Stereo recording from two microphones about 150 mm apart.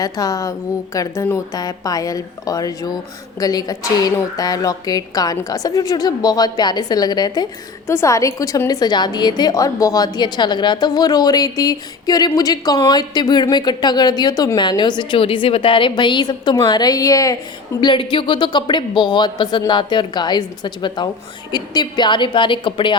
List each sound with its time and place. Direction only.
0.0 s a woman's voice: 25° left (ahead or behind)